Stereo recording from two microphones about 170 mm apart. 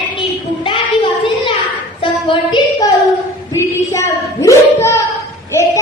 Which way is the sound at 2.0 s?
30° left (ahead or behind).